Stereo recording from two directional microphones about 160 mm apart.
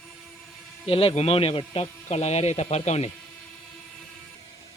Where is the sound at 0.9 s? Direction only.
35° left (ahead or behind).